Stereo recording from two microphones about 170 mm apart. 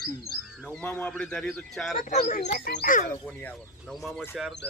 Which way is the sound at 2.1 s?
50° left (ahead or behind).